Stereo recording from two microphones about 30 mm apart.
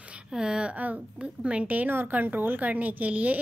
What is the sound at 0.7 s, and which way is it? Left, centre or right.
A woman's voice, right.